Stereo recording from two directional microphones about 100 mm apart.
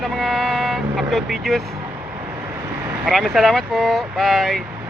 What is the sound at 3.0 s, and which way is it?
Speech, centre (ahead or behind).